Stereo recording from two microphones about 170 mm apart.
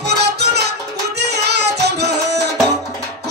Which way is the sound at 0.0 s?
75° right (ahead or behind).